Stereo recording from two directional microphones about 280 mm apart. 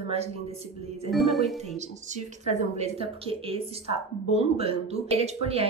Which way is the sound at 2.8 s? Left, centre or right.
Right.